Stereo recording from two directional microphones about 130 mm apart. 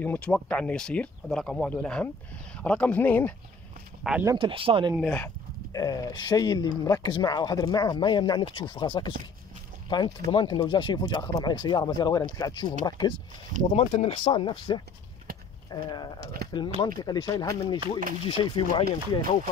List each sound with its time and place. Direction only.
0.0 s speech: 10° left (ahead or behind)
4.1 s speech: centre (ahead or behind)
4.4 s speech: 45° right (ahead or behind)
5.0 s speech: 15° left (ahead or behind)
5.7 s speech: 30° left (ahead or behind)
13.7 s speech: 50° left (ahead or behind)
14.1 s speech: 35° left (ahead or behind)